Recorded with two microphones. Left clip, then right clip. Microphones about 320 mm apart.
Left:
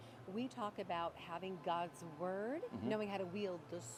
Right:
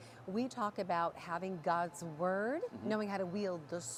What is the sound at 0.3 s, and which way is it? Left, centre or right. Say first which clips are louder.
A woman's voice: right 6 dB; right.